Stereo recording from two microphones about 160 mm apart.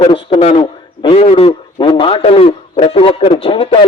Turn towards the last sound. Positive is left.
turn(degrees=35)  # may be behind; listen again after turning